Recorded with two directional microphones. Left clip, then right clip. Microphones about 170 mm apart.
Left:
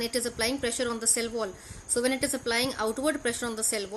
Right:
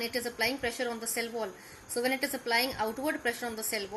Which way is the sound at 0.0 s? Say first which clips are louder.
Left 2 dB; 80° left.